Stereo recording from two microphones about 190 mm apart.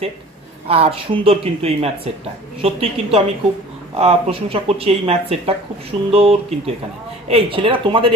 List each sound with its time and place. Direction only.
0.7 s speech: 30° right (ahead or behind)